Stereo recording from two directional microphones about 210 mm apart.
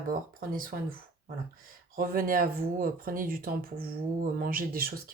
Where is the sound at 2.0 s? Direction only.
45° right (ahead or behind).